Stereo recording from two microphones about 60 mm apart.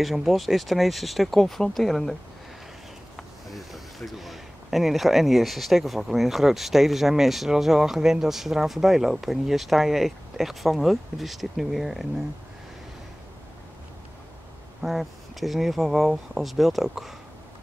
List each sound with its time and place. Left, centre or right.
0.0 s speech: centre
3.2 s speech: centre
14.8 s speech: centre